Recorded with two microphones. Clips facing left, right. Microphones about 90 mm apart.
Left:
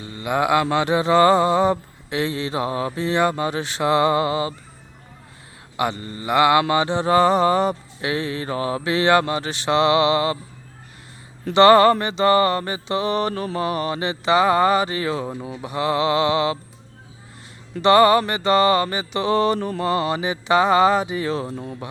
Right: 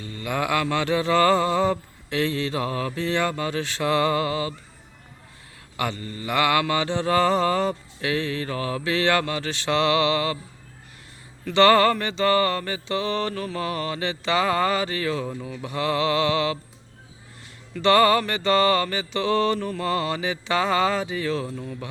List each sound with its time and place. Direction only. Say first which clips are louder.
0.0 s mantra: left 5 dB; 15° left (ahead or behind)
5.7 s mantra: left 4 dB; 15° left (ahead or behind)
11.4 s mantra: left 4 dB; 20° left (ahead or behind)
17.8 s mantra: left 4 dB; 15° left (ahead or behind)
21.5 s speech: left 2 dB; 35° left (ahead or behind)